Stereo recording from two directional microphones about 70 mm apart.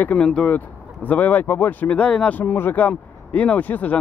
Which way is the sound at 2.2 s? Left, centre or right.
Left.